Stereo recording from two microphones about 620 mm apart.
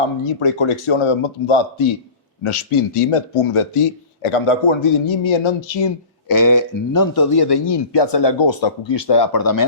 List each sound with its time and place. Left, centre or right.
0.3 s speech: left